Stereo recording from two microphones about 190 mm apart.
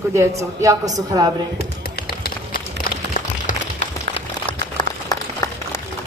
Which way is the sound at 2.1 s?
50° left (ahead or behind).